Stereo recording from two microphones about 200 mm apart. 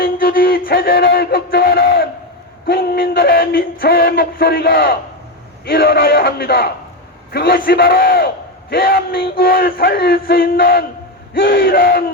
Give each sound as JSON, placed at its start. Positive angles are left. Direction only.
{"t": 0.0, "sound": "music", "side_deg": 45}